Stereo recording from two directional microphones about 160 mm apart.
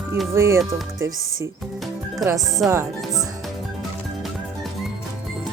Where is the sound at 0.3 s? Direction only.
15° right (ahead or behind).